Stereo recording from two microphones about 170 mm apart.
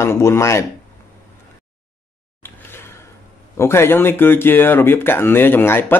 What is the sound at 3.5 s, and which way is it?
A man's voice, 15° left (ahead or behind).